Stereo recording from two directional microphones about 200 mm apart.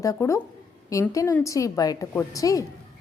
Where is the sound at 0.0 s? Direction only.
15° left (ahead or behind).